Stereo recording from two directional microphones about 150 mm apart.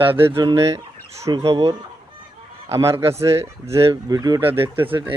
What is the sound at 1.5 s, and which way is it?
Speech, 40° right (ahead or behind).